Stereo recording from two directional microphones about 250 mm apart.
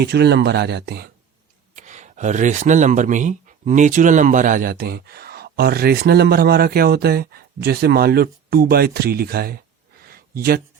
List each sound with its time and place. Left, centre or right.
0.0 s speech: right
1.7 s speech: right
10.1 s a sound: right